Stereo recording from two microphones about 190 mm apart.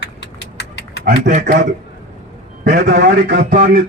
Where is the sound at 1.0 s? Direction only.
45° right (ahead or behind).